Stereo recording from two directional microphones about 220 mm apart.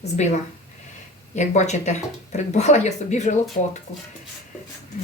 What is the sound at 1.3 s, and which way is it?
Speech, 30° left (ahead or behind).